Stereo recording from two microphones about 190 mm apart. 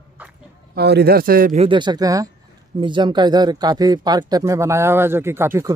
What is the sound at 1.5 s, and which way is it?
Speech, 25° right (ahead or behind).